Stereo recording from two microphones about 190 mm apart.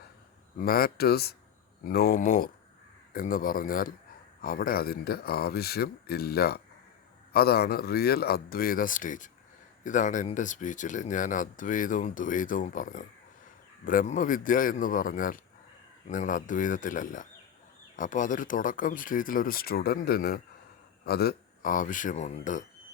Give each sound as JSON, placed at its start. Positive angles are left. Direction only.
{"t": 0.6, "sound": "speech", "side_deg": 50}